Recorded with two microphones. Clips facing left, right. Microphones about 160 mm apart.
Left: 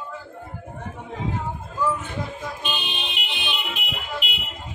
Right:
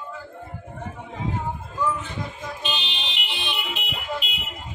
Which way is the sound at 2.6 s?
55° left (ahead or behind).